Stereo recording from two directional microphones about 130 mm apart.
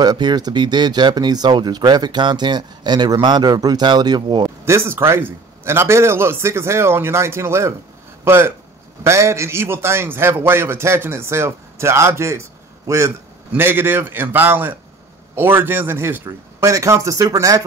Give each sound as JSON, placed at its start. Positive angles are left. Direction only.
{"t": 0.0, "sound": "speech", "side_deg": -35}
{"t": 4.7, "sound": "a man's voice", "side_deg": -20}